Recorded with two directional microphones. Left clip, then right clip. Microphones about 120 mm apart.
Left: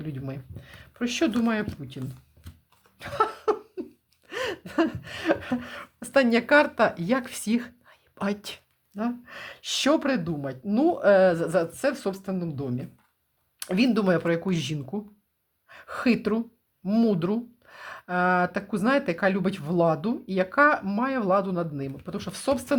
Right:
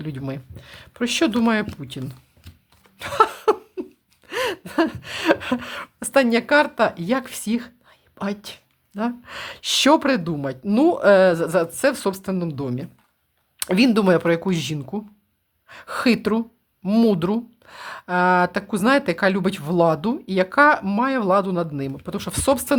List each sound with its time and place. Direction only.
0.0 s speech: 35° right (ahead or behind)
3.0 s a sound: 45° right (ahead or behind)
4.3 s gasp: 25° right (ahead or behind)
5.1 s speech: 35° right (ahead or behind)
6.1 s speech: 15° right (ahead or behind)
9.0 s speech: 25° right (ahead or behind)
11.7 s speech: 35° right (ahead or behind)